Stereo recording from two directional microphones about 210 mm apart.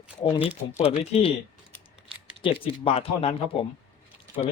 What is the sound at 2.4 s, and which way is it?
Speech, 25° left (ahead or behind).